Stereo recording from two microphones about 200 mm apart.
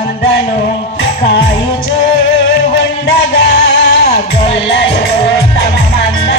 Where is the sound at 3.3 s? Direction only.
55° left (ahead or behind).